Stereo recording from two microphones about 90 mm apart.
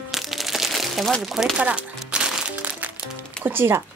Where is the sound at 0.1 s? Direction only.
Centre (ahead or behind).